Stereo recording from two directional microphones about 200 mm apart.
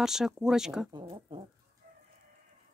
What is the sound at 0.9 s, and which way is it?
Speech, 25° right (ahead or behind).